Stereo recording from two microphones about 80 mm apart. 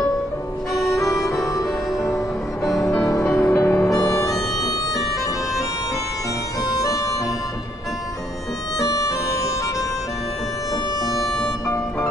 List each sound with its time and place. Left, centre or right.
1.0 s harmonica: left
3.1 s music: left
4.0 s harmonica: left
6.7 s music: left
8.7 s music: left
11.1 s music: centre